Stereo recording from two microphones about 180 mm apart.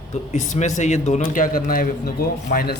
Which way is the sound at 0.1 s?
40° left (ahead or behind).